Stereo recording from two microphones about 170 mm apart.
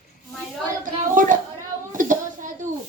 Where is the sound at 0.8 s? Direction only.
50° right (ahead or behind).